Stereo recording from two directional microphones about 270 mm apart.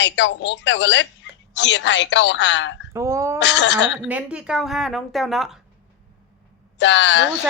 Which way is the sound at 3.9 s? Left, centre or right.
Centre.